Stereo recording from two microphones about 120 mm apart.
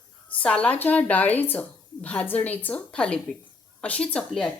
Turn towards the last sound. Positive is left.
turn(degrees=5)  # may be behind; listen again after turning